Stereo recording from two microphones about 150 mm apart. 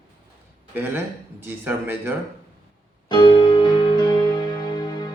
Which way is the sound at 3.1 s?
30° left (ahead or behind).